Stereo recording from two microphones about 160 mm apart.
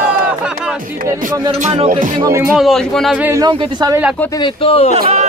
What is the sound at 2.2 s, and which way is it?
Speech, 20° right (ahead or behind).